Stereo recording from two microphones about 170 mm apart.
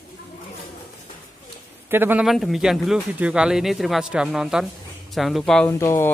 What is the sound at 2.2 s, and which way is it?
Speech, centre (ahead or behind).